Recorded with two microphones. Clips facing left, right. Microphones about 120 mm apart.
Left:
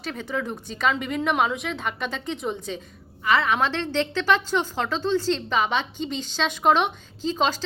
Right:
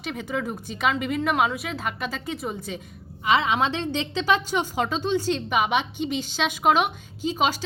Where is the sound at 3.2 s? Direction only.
20° right (ahead or behind).